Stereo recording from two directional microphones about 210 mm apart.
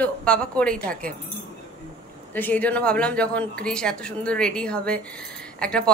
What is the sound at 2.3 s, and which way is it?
A woman's voice, 10° left (ahead or behind).